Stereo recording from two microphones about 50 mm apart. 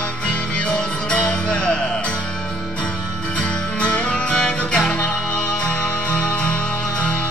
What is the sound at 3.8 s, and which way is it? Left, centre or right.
Music, left.